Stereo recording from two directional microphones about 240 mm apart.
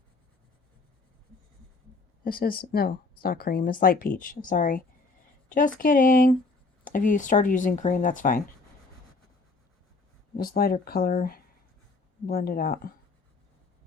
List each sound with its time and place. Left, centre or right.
2.2 s speech: left
10.3 s speech: left